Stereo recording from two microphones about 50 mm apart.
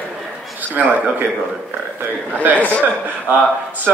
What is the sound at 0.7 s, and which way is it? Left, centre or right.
Speech, right.